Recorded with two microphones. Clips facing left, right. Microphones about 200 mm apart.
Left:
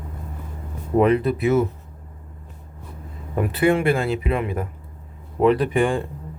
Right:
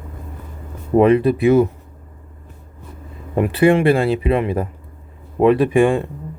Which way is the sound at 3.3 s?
25° right (ahead or behind).